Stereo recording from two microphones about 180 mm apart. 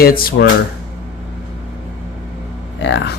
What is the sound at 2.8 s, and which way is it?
Speech, 80° left.